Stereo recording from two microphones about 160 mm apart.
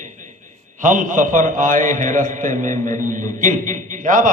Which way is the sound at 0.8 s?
55° right (ahead or behind).